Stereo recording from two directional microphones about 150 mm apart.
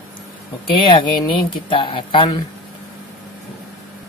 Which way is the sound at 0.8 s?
35° left (ahead or behind).